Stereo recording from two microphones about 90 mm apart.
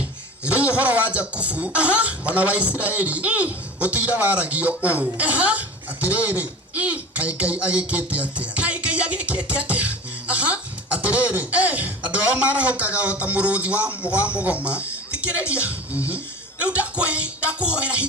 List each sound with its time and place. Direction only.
0.4 s a man's voice: 15° right (ahead or behind)